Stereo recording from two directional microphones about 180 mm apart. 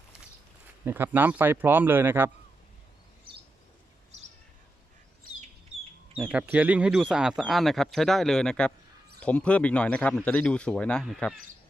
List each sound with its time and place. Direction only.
0.9 s a man's voice: 10° right (ahead or behind)
6.1 s speech: 5° right (ahead or behind)